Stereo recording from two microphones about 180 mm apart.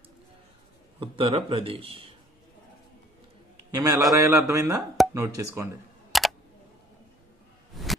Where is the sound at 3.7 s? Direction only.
20° right (ahead or behind).